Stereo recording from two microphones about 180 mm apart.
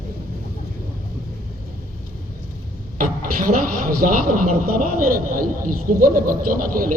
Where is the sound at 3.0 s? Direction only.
50° right (ahead or behind).